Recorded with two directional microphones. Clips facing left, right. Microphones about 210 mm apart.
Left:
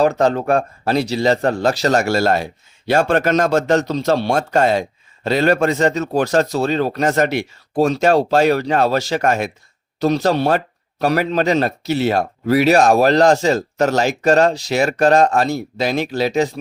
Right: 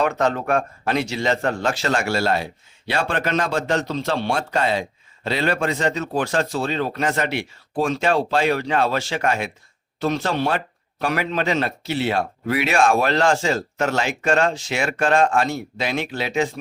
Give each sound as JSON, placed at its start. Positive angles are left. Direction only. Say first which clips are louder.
{"t": 0.0, "sound": "speech", "louder": "left 5 dB", "side_deg": 35}